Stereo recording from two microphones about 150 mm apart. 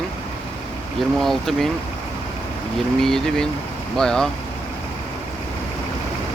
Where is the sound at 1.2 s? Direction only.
Centre (ahead or behind).